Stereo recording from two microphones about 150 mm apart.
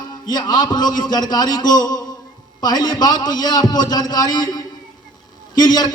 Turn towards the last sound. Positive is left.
turn(degrees=25)  # may be behind; listen again after turning